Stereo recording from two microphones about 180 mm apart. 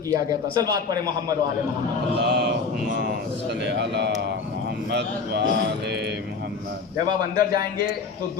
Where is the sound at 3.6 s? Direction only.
70° right (ahead or behind).